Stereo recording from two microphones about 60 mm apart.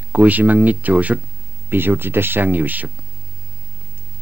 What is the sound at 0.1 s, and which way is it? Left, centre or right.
Speech, right.